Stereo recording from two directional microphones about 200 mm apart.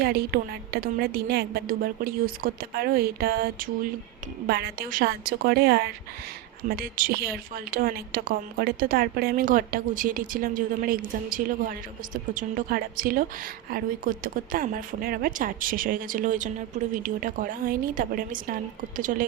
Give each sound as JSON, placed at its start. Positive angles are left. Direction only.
{"t": 0.0, "sound": "a woman's voice", "side_deg": -50}